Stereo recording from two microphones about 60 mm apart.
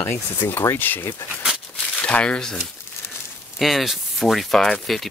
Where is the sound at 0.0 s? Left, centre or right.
Left.